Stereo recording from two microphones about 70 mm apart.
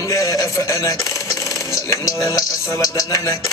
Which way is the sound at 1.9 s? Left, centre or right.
Left.